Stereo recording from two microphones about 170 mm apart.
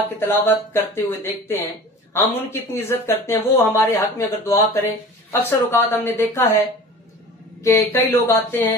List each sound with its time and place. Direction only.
0.2 s speech: 15° left (ahead or behind)
7.6 s speech: 15° left (ahead or behind)